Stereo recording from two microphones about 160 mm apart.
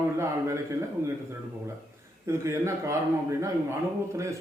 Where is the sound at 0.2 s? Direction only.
15° right (ahead or behind).